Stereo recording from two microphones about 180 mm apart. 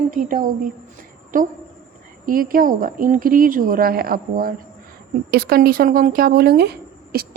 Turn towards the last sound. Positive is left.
turn(degrees=-60)  # may be behind; listen again after turning